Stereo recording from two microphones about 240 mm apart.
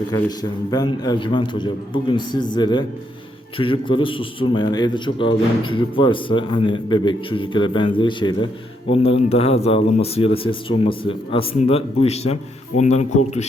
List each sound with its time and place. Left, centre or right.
0.1 s a man's voice: centre